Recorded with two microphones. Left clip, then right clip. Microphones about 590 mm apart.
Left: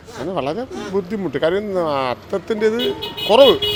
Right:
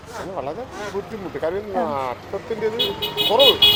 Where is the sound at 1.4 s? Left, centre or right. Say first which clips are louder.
Left 4 dB; left.